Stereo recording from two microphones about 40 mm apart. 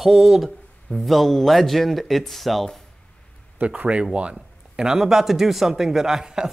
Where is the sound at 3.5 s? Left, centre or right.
Right.